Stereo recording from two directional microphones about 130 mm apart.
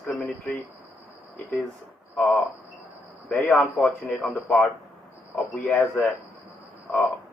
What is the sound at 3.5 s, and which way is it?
A man's voice, 10° left (ahead or behind).